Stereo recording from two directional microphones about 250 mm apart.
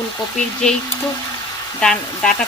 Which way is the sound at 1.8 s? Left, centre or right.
Centre.